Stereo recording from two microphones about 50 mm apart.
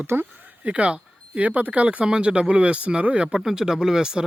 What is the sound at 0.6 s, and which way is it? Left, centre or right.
Speech, right.